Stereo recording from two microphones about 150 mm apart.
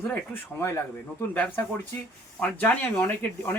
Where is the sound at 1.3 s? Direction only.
10° left (ahead or behind).